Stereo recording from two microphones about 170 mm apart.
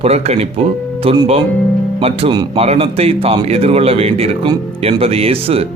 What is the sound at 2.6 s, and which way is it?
A man's voice, 35° right (ahead or behind).